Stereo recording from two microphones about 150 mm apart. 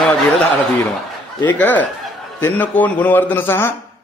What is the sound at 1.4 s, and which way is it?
A man's voice, 10° left (ahead or behind).